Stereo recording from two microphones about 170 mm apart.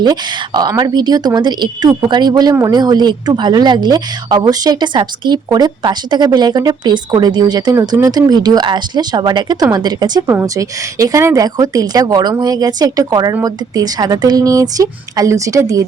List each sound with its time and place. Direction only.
0.0 s a woman's voice: 25° right (ahead or behind)